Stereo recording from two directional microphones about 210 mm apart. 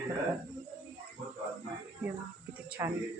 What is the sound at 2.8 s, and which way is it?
Speech, 15° right (ahead or behind).